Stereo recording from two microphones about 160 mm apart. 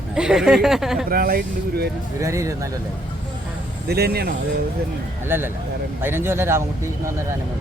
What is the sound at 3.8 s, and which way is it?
Speech, 80° right.